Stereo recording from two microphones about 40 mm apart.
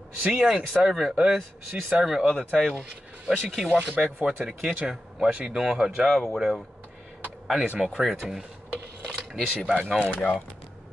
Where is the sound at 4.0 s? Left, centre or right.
Right.